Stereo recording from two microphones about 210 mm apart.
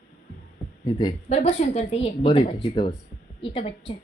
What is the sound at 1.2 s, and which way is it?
A woman's voice, 30° left (ahead or behind).